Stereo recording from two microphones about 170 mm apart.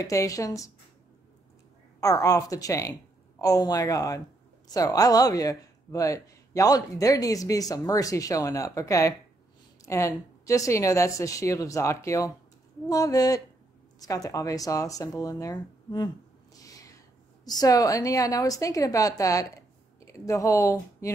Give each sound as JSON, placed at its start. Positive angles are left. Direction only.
{"t": 0.0, "sound": "speech", "side_deg": 20}
{"t": 2.0, "sound": "a woman's voice", "side_deg": 20}
{"t": 16.5, "sound": "a sound", "side_deg": 20}
{"t": 17.5, "sound": "speech", "side_deg": 20}